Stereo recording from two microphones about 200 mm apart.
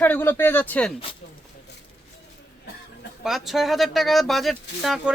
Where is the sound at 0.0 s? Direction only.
10° left (ahead or behind).